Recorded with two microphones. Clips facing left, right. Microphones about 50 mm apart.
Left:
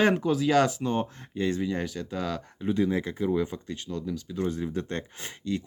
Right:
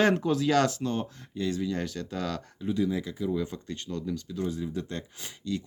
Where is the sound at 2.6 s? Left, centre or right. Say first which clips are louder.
Left 2 dB; left.